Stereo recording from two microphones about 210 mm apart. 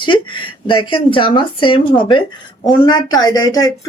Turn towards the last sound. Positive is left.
turn(degrees=15)  # may be behind; listen again after turning